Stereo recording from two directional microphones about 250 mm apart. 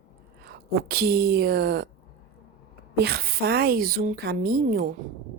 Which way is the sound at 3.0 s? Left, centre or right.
Right.